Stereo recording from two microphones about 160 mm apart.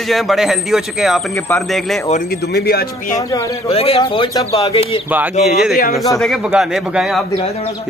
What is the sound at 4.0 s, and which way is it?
Speech, 25° left (ahead or behind).